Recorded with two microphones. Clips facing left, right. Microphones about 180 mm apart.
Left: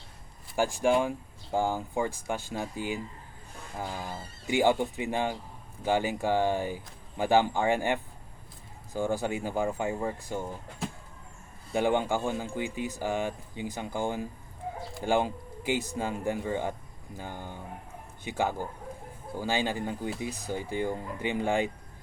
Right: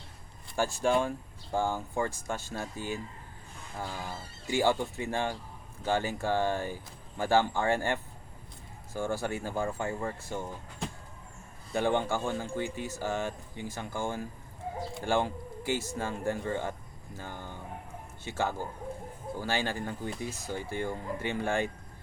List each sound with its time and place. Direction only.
0.5 s speech: 15° left (ahead or behind)
11.7 s speech: 15° left (ahead or behind)